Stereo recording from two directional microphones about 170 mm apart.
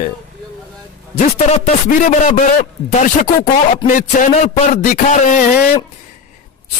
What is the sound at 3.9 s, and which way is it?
Speech, 50° left (ahead or behind).